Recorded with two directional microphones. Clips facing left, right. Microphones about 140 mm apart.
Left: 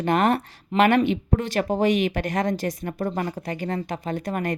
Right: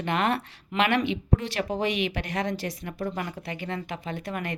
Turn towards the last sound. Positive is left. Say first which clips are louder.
# left 6 dB
turn(degrees=45)  # may be behind; listen again after turning